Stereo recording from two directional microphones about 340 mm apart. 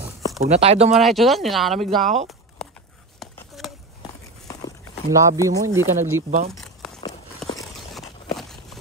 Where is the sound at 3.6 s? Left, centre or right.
Centre.